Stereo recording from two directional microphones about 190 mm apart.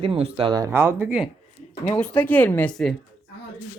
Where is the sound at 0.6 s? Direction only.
10° right (ahead or behind).